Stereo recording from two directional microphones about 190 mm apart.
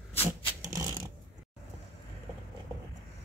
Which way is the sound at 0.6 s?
20° right (ahead or behind).